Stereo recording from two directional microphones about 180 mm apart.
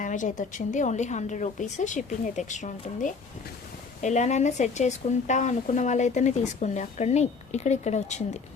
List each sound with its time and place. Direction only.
0.0 s a woman's voice: 45° left (ahead or behind)